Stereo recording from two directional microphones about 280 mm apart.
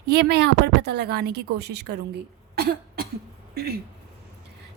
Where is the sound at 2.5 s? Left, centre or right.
Right.